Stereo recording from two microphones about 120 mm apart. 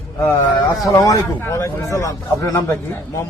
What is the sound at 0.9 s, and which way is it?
A man's voice, 30° left (ahead or behind).